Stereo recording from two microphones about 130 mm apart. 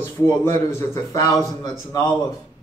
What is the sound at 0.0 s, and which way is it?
A man's voice, 15° left (ahead or behind).